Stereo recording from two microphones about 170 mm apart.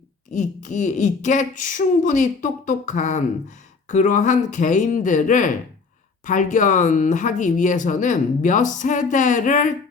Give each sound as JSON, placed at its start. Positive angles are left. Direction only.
{"t": 0.3, "sound": "speech", "side_deg": 45}